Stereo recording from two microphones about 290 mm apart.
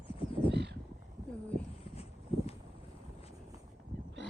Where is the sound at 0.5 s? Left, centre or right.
Right.